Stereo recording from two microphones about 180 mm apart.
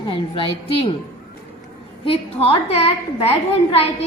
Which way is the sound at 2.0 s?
30° left (ahead or behind).